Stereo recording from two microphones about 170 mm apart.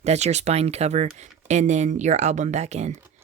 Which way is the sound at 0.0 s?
40° right (ahead or behind).